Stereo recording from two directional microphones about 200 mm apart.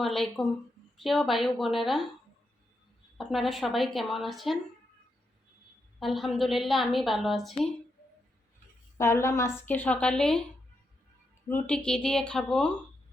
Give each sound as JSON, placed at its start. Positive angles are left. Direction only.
{"t": 0.0, "sound": "a woman's voice", "side_deg": 0}
{"t": 3.2, "sound": "a woman's voice", "side_deg": 0}
{"t": 6.0, "sound": "a woman's voice", "side_deg": 0}
{"t": 9.0, "sound": "a woman's voice", "side_deg": 15}
{"t": 11.4, "sound": "a woman's voice", "side_deg": 10}